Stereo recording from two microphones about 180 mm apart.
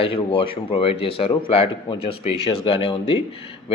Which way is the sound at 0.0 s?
30° left (ahead or behind).